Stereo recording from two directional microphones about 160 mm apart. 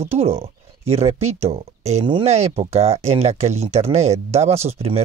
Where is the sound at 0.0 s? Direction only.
40° right (ahead or behind).